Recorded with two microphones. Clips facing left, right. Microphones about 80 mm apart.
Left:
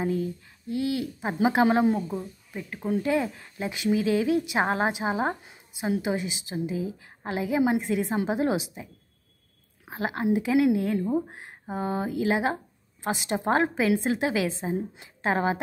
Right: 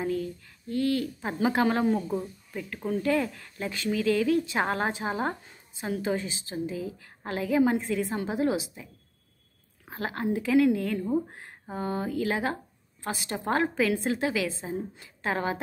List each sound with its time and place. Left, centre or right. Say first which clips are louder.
0.0 s speech: left 2 dB; left
9.8 s a woman's voice: left 4 dB; centre